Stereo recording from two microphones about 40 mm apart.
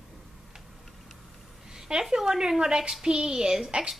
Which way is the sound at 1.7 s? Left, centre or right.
Centre.